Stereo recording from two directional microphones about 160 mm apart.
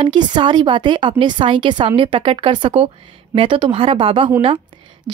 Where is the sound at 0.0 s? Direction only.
30° right (ahead or behind).